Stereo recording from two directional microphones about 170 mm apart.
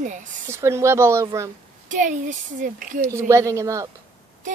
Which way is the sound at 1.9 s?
50° right (ahead or behind).